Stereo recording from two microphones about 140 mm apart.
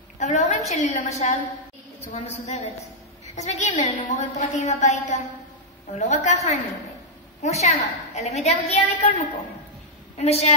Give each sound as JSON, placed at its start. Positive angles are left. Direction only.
{"t": 0.2, "sound": "a woman's voice", "side_deg": 55}